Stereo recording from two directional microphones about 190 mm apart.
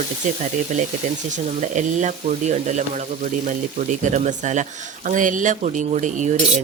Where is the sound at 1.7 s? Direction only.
40° right (ahead or behind).